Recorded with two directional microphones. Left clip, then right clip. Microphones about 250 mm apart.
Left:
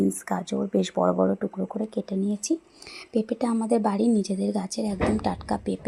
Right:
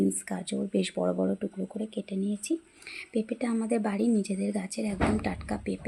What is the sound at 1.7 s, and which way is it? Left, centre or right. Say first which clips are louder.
Speech: left 5 dB; centre.